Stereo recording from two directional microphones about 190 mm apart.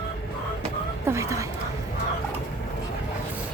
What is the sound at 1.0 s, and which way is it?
Speech, 15° right (ahead or behind).